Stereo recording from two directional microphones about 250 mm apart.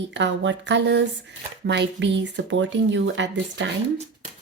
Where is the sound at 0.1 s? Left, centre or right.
Right.